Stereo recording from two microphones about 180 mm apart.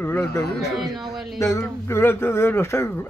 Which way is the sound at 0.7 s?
Centre (ahead or behind).